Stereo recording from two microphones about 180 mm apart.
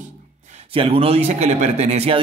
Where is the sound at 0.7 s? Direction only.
30° right (ahead or behind).